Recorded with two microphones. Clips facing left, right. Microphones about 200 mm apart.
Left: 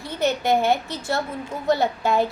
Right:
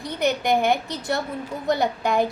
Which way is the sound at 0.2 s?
15° right (ahead or behind).